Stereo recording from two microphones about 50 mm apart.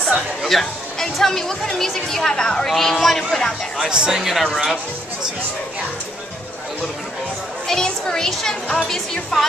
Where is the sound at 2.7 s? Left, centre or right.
Centre.